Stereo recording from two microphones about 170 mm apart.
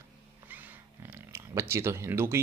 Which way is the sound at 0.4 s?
10° right (ahead or behind).